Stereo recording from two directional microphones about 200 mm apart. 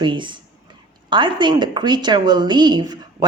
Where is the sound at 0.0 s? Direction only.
25° right (ahead or behind).